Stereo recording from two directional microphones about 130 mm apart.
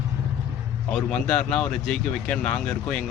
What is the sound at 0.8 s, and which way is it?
Speech, 5° left (ahead or behind).